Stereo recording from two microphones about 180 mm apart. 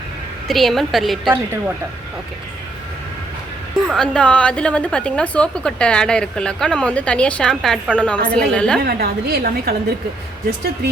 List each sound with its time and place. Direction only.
0.4 s a woman's voice: centre (ahead or behind)
3.8 s a woman's voice: 5° left (ahead or behind)
8.8 s a woman's voice: 55° right (ahead or behind)